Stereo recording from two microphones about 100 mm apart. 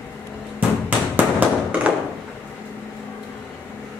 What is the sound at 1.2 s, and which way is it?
Tap, 15° right (ahead or behind).